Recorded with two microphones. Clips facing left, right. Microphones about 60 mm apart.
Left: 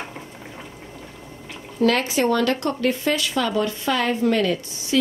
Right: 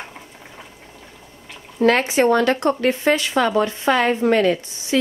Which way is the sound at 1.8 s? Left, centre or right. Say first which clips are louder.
Right 3 dB; right.